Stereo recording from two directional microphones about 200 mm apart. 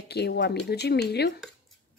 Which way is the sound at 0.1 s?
55° left (ahead or behind).